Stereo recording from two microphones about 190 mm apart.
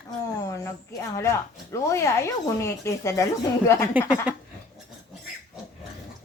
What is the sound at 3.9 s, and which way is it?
Speech, 10° right (ahead or behind).